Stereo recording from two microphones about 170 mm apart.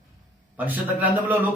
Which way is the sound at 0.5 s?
10° right (ahead or behind).